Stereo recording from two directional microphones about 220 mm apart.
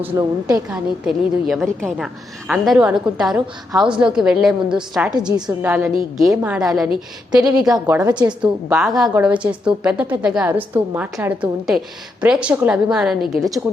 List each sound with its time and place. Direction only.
0.0 s a woman's voice: 10° right (ahead or behind)
0.7 s a woman's voice: centre (ahead or behind)
8.0 s a woman's voice: 20° right (ahead or behind)
9.0 s a woman's voice: 5° right (ahead or behind)